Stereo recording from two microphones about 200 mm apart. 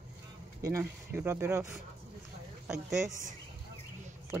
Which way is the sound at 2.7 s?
Centre (ahead or behind).